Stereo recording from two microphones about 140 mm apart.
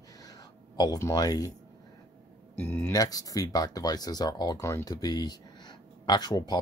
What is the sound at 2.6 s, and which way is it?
Speech, 15° left (ahead or behind).